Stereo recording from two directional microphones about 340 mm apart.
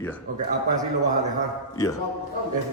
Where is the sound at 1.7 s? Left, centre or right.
Centre.